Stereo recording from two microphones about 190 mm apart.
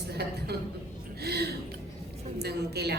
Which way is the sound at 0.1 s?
60° right (ahead or behind).